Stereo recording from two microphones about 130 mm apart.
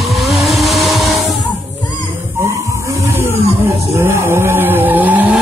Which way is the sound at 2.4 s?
25° right (ahead or behind).